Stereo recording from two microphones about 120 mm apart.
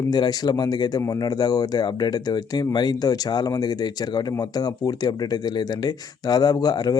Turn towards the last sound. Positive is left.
turn(degrees=35)  # may be behind; listen again after turning